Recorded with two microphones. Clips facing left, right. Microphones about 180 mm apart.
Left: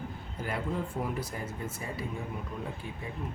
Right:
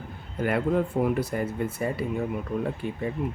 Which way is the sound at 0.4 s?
65° right (ahead or behind).